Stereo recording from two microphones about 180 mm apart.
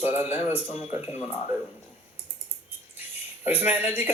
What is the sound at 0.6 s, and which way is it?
Speech, 35° left (ahead or behind).